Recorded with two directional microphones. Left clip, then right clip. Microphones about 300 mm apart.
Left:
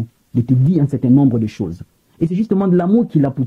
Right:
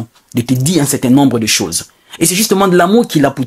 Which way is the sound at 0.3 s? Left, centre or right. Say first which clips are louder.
Right 4 dB; centre.